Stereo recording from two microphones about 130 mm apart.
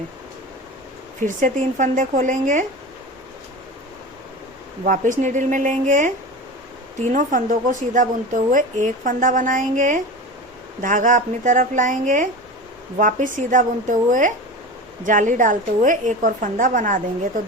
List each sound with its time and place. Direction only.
1.2 s speech: 80° right
4.9 s speech: 85° right
7.1 s a woman's voice: 75° right (ahead or behind); by 17.4 s 90° right